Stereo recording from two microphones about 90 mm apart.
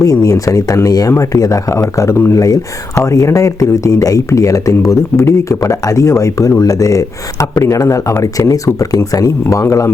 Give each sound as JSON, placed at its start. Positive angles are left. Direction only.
{"t": 0.0, "sound": "speech", "side_deg": 40}